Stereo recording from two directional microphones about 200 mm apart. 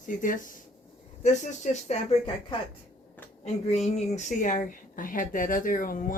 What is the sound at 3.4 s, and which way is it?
A woman's voice, 35° left (ahead or behind).